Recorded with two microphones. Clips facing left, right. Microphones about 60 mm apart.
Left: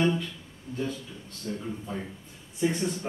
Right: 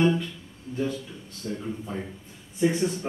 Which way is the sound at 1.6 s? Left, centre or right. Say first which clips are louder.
Right 2 dB; centre.